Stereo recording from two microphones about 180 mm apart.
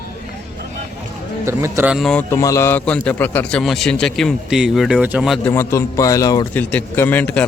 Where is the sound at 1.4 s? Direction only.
15° right (ahead or behind).